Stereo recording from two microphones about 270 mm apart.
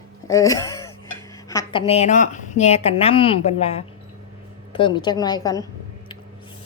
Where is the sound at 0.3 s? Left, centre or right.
Centre.